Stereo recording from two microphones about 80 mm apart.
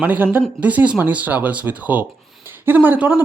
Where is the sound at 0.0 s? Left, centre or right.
Right.